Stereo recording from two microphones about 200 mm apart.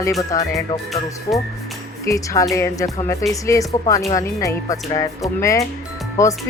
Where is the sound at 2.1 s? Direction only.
15° left (ahead or behind).